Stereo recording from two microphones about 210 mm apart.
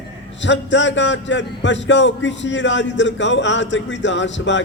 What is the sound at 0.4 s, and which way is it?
A man's voice, 60° left (ahead or behind).